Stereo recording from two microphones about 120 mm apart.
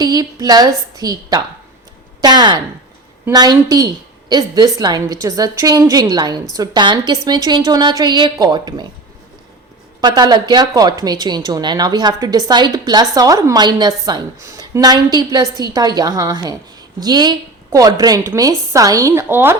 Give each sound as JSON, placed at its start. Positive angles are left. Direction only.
{"t": 0.0, "sound": "a woman's voice", "side_deg": -35}
{"t": 10.0, "sound": "a woman's voice", "side_deg": -35}